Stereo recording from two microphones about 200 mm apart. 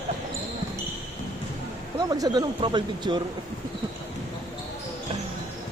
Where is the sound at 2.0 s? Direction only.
20° right (ahead or behind).